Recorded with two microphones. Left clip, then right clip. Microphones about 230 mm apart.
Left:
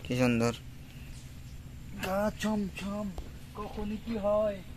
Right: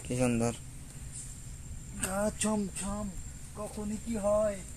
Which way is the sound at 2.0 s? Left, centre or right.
Left.